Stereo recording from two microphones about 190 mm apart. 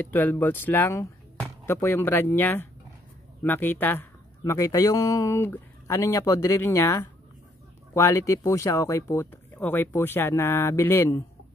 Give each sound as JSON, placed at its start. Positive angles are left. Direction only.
{"t": 0.0, "sound": "speech", "side_deg": 10}